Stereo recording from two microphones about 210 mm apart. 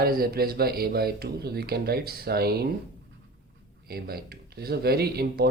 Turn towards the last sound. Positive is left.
turn(degrees=-50)  # may be behind; listen again after turning